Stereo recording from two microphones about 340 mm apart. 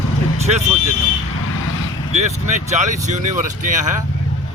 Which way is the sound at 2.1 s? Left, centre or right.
Centre.